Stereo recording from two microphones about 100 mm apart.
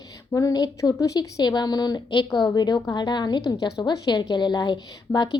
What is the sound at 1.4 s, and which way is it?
A woman's voice, 45° left (ahead or behind).